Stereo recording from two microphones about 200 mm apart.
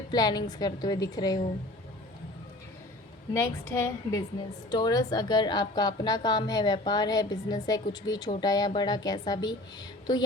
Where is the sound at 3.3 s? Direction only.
15° left (ahead or behind).